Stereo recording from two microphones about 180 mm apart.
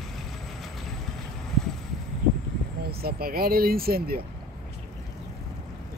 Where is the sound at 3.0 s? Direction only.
55° right (ahead or behind).